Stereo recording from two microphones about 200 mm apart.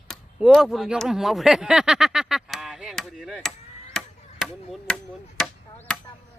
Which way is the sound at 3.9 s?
Centre (ahead or behind).